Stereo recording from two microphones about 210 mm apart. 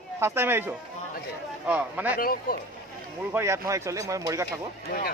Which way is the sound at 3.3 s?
15° right (ahead or behind).